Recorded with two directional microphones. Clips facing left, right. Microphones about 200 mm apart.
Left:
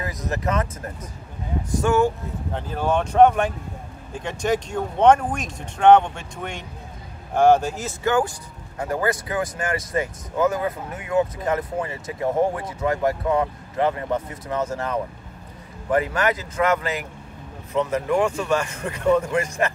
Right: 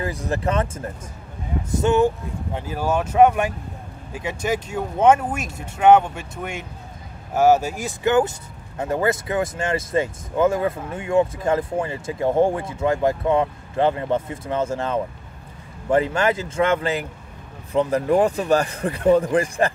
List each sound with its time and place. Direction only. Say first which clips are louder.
0.0 s speech: right 3 dB; 30° right (ahead or behind)
2.5 s speech: even; 5° right (ahead or behind); by 19.7 s 30° right (ahead or behind)